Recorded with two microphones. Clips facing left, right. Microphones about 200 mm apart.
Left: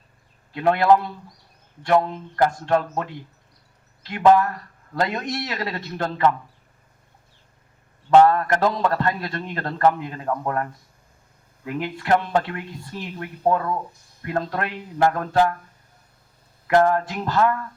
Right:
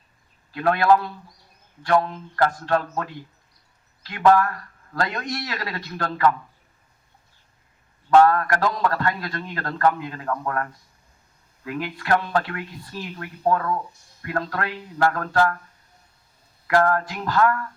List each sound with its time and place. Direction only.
0.5 s a man's voice: 20° left (ahead or behind)
8.1 s a man's voice: 25° left (ahead or behind)
16.6 s a man's voice: 20° left (ahead or behind)